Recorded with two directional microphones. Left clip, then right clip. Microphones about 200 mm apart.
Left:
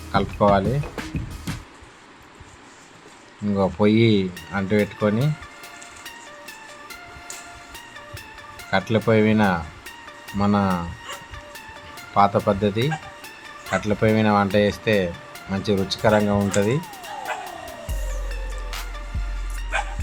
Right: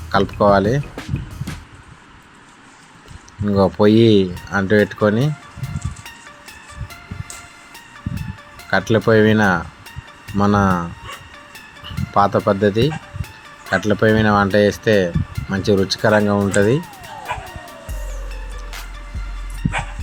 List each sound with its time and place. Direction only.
0.1 s speech: 20° right (ahead or behind)
3.4 s speech: 20° right (ahead or behind)
8.7 s speech: 20° right (ahead or behind)
12.1 s speech: 20° right (ahead or behind)